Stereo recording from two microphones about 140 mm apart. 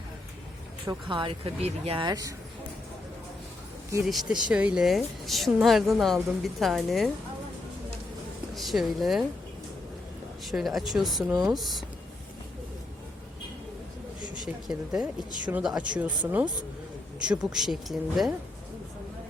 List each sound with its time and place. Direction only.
0.9 s speech: 35° right (ahead or behind)
2.0 s speech: 25° right (ahead or behind)
4.0 s a woman's voice: centre (ahead or behind)
8.5 s a woman's voice: centre (ahead or behind)
10.4 s a woman's voice: centre (ahead or behind)
14.4 s a woman's voice: 5° right (ahead or behind)